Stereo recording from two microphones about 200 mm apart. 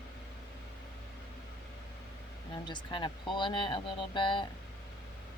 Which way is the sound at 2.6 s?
25° left (ahead or behind).